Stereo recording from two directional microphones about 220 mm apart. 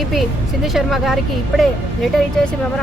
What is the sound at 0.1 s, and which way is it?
Speech, centre (ahead or behind).